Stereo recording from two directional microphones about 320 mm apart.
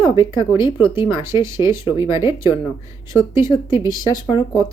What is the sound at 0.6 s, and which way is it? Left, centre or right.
Speech, centre.